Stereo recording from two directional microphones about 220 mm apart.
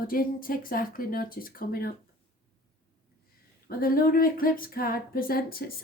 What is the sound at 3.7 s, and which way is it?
Speech, 40° left (ahead or behind).